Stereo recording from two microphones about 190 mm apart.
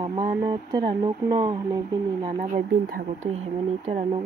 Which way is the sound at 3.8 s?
30° right (ahead or behind).